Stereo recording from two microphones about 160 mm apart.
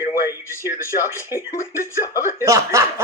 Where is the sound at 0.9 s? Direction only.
55° left (ahead or behind).